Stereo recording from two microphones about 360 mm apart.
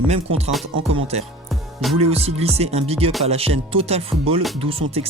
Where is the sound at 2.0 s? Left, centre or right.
Centre.